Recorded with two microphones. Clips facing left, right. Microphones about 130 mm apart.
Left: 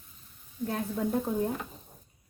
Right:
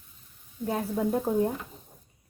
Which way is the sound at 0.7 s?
10° right (ahead or behind).